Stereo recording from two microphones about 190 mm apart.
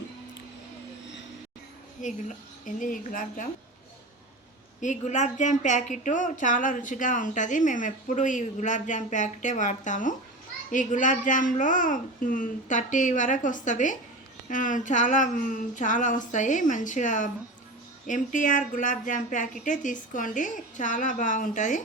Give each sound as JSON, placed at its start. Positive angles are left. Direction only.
{"t": 2.0, "sound": "speech", "side_deg": 40}
{"t": 4.8, "sound": "a woman's voice", "side_deg": 40}